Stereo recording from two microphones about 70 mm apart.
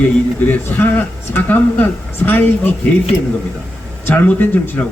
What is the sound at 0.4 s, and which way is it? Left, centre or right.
A man's voice, left.